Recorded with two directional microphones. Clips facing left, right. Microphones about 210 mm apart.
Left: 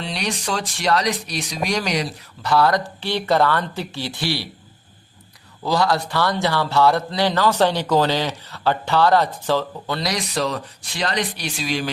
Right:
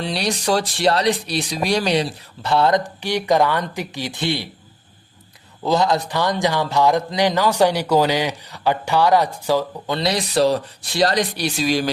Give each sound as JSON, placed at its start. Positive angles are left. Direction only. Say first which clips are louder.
{"t": 0.0, "sound": "speech", "louder": "right 4 dB", "side_deg": -35}
{"t": 5.6, "sound": "speech", "louder": "right 2 dB", "side_deg": -20}